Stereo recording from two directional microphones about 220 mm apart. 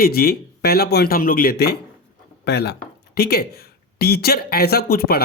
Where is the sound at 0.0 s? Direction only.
45° left (ahead or behind).